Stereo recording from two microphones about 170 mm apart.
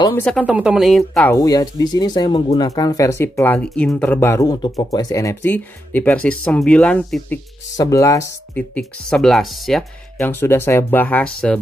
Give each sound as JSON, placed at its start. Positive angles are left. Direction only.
{"t": 0.1, "sound": "speech", "side_deg": 10}
{"t": 0.4, "sound": "speech", "side_deg": -5}
{"t": 1.2, "sound": "speech", "side_deg": 20}
{"t": 7.7, "sound": "speech", "side_deg": 20}
{"t": 8.7, "sound": "speech", "side_deg": 5}
{"t": 10.4, "sound": "speech", "side_deg": 15}